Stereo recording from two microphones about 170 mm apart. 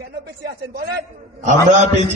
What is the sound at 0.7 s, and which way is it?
Speech, 65° right (ahead or behind).